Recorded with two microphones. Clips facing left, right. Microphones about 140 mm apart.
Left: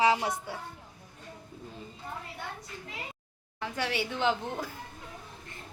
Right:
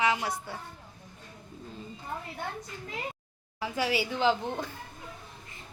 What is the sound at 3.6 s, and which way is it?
A woman's voice, 5° right (ahead or behind).